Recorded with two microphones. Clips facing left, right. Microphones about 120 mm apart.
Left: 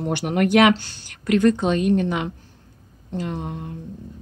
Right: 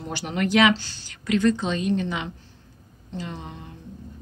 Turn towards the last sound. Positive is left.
turn(degrees=50)  # may be behind; listen again after turning